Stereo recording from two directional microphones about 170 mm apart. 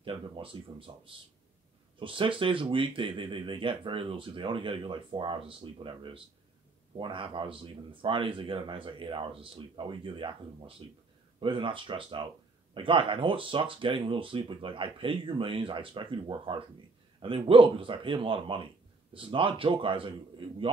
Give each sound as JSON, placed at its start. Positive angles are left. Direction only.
{"t": 0.0, "sound": "speech", "side_deg": -30}
{"t": 11.3, "sound": "speech", "side_deg": -30}